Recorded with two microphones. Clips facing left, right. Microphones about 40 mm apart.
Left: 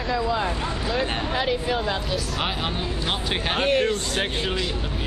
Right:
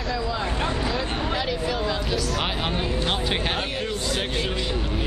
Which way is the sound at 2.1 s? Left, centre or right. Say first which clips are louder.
Right 1 dB; centre.